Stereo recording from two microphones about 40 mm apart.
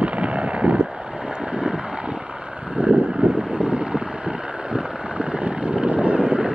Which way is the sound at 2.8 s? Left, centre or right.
Right.